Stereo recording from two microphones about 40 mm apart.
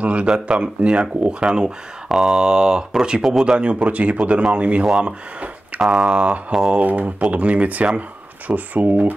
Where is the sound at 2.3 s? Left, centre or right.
Centre.